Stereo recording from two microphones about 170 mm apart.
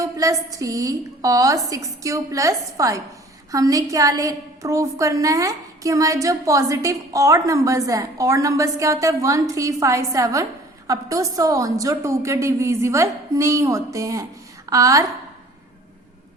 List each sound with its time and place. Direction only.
0.0 s a woman's voice: 20° right (ahead or behind)